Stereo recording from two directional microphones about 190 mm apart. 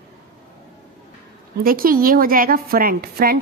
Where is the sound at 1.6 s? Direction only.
50° right (ahead or behind).